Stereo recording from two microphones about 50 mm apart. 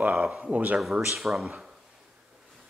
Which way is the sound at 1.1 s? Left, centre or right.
Centre.